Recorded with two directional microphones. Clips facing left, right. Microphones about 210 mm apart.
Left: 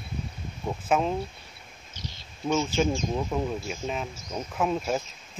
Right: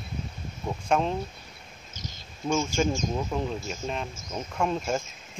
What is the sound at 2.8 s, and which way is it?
Speech, 5° left (ahead or behind).